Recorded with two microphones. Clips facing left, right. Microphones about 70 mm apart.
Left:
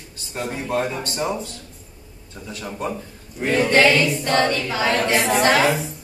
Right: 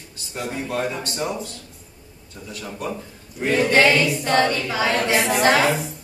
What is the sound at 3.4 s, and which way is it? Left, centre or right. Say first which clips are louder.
A capella: left 1 dB; centre.